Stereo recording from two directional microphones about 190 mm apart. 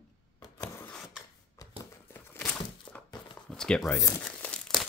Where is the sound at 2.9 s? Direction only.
10° left (ahead or behind).